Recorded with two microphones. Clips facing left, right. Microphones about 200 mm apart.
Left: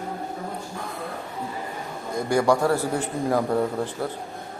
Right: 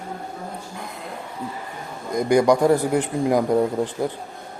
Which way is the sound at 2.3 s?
15° right (ahead or behind).